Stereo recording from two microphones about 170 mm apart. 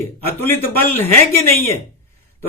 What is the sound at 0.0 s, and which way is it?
Speech, 15° left (ahead or behind).